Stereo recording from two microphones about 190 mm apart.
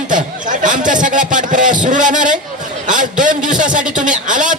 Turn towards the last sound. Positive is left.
turn(degrees=-45)  # may be behind; listen again after turning